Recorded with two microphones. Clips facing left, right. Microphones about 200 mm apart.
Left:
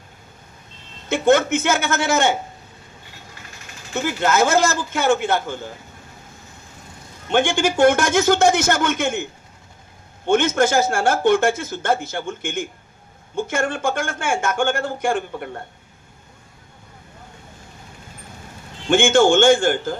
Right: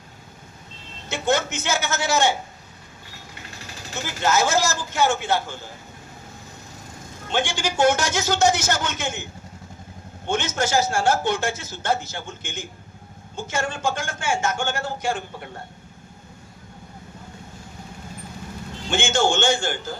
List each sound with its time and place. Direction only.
1.0 s speech: 55° left (ahead or behind)
3.9 s speech: 55° left (ahead or behind)
7.3 s speech: 55° left (ahead or behind)
10.2 s speech: 55° left (ahead or behind)
18.9 s a man's voice: 55° left (ahead or behind)